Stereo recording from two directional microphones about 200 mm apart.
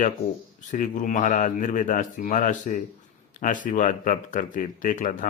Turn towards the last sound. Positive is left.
turn(degrees=40)  # may be behind; listen again after turning